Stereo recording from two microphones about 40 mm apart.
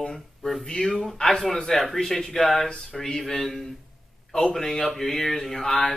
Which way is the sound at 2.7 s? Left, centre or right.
Centre.